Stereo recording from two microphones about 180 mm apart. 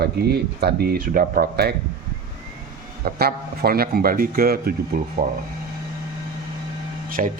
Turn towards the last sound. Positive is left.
turn(degrees=-40)  # may be behind; listen again after turning